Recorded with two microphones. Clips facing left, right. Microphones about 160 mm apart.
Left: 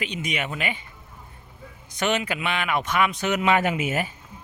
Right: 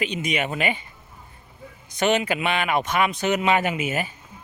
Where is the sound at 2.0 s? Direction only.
35° right (ahead or behind); by 4.1 s 15° right (ahead or behind).